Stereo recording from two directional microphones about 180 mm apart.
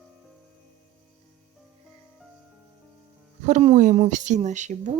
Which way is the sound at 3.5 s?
40° right (ahead or behind).